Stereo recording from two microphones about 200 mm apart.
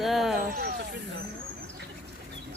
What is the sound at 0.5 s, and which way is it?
Speech, 55° right (ahead or behind).